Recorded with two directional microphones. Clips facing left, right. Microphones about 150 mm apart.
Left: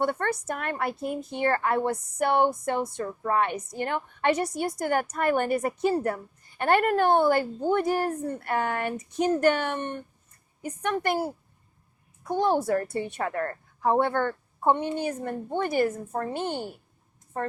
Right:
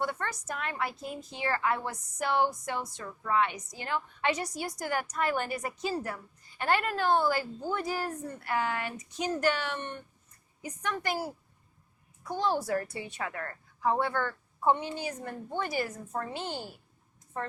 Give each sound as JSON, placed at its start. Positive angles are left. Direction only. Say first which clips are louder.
{"t": 0.0, "sound": "a woman's voice", "louder": "left 7 dB", "side_deg": 55}